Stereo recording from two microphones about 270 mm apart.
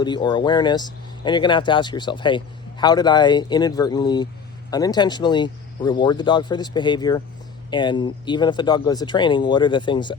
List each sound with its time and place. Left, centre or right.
0.0 s speech: centre